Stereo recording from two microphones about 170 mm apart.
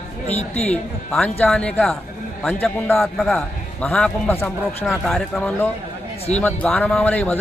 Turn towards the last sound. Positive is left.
turn(degrees=10)  # may be behind; listen again after turning